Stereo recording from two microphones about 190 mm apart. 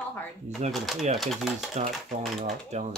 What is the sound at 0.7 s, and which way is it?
Speech, centre (ahead or behind).